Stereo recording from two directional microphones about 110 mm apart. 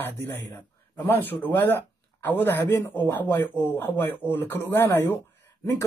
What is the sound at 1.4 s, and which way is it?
Speech, 15° left (ahead or behind).